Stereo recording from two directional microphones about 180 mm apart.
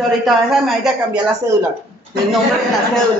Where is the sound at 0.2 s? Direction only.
Centre (ahead or behind).